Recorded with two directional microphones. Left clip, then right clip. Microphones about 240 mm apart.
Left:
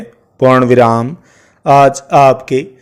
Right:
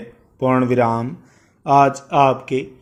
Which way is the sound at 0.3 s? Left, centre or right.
Left.